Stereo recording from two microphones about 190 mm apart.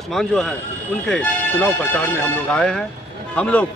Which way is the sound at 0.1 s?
Centre (ahead or behind).